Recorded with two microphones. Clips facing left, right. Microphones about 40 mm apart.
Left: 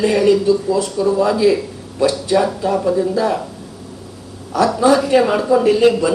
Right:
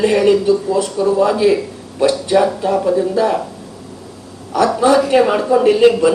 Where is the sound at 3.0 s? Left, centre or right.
Right.